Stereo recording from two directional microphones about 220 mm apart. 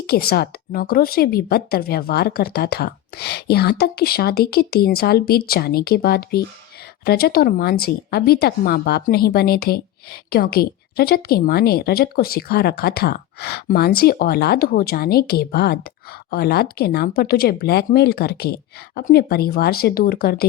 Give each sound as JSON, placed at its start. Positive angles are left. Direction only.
{"t": 0.1, "sound": "speech", "side_deg": 45}